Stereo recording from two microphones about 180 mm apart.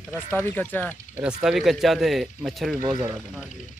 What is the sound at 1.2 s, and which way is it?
Speech, 5° right (ahead or behind).